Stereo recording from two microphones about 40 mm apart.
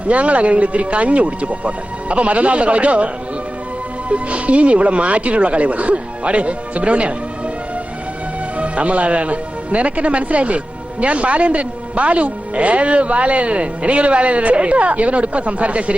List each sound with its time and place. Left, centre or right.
0.1 s speech: right
4.1 s speech: right
8.5 s speech: right